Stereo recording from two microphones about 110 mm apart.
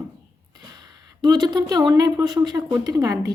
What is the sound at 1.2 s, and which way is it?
Speech, 40° right (ahead or behind).